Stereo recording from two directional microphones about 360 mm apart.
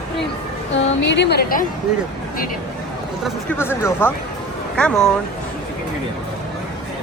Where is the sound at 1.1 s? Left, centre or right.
Left.